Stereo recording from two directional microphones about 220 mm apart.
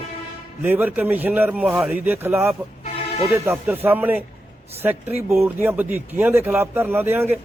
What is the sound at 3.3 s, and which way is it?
Speech, 10° right (ahead or behind).